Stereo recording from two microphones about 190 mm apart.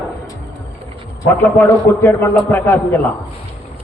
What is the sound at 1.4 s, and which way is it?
A man's voice, 10° left (ahead or behind).